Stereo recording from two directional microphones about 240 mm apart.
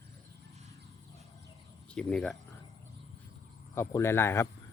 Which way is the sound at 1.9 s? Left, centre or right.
Centre.